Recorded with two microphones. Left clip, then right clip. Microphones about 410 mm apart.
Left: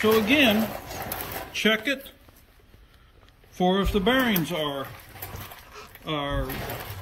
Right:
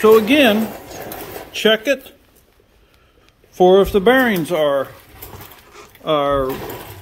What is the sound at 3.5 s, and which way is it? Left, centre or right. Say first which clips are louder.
Speech: right 12 dB; centre.